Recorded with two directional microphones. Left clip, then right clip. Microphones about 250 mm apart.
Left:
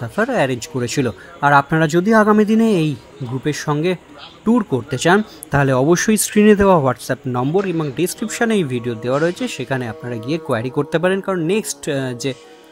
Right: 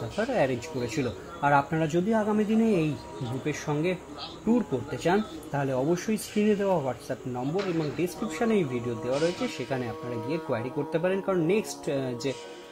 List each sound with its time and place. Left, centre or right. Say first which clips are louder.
0.2 s speech: left 9 dB; left